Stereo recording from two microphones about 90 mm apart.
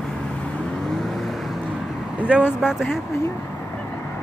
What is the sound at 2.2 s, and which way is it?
Speech, 15° right (ahead or behind).